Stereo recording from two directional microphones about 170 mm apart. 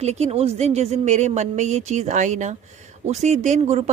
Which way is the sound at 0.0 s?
40° right (ahead or behind).